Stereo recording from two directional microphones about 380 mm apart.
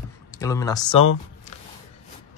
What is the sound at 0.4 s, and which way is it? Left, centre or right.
Speech, centre.